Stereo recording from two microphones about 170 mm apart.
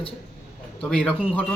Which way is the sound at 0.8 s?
5° left (ahead or behind).